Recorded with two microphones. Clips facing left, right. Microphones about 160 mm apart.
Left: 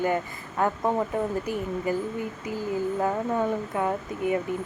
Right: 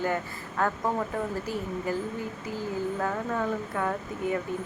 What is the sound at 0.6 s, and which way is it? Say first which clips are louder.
A woman's voice: left 3 dB; 20° left (ahead or behind).